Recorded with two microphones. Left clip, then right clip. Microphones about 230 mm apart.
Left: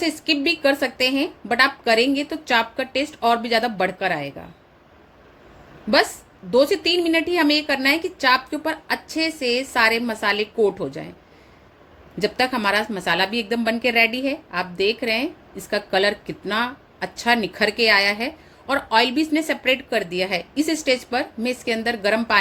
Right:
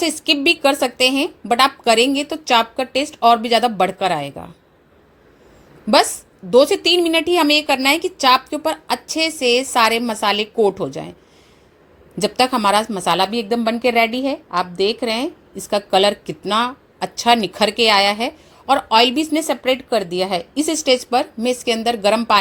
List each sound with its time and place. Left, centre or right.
0.0 s a woman's voice: right
6.5 s a woman's voice: right
12.2 s a woman's voice: right